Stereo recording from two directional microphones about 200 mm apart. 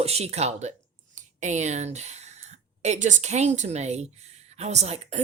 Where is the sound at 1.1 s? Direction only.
35° right (ahead or behind).